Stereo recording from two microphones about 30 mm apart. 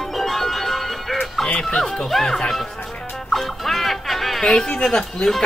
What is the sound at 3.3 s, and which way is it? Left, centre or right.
Music, centre.